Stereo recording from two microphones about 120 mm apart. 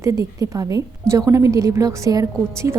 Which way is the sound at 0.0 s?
25° right (ahead or behind).